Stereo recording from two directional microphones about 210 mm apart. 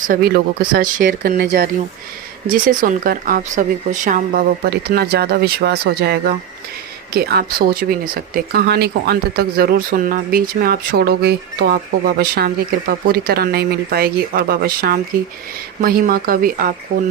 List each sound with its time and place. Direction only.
0.0 s speech: 45° right (ahead or behind)